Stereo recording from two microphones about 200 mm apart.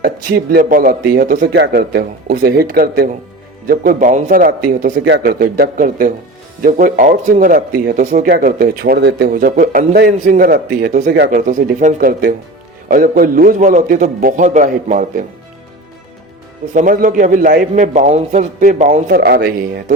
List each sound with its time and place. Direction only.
0.0 s speech: 50° right (ahead or behind)
5.0 s speech: 55° right (ahead or behind); by 15.2 s 40° right (ahead or behind)
16.7 s a man's voice: 40° right (ahead or behind)